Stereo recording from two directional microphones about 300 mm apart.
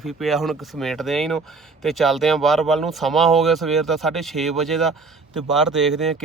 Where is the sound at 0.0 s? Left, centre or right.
Centre.